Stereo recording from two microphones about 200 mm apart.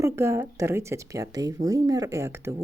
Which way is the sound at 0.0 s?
15° right (ahead or behind).